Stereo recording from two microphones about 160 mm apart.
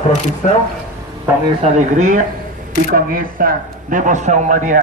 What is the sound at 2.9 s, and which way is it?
A man's voice, 60° right (ahead or behind).